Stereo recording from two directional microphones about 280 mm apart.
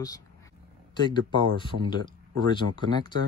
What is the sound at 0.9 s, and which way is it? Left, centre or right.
Speech, centre.